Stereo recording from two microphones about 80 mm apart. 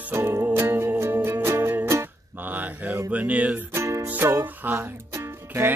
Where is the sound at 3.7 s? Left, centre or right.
Right.